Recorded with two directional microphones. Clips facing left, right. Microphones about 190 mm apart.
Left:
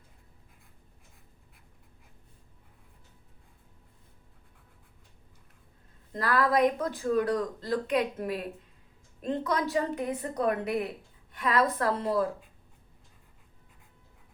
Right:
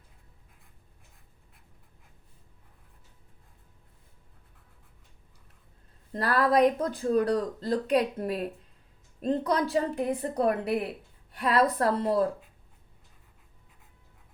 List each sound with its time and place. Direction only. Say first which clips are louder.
6.1 s speech: right 2 dB; 35° right (ahead or behind)